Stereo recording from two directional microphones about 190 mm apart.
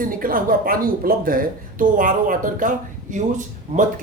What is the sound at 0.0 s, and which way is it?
Speech, 45° right (ahead or behind).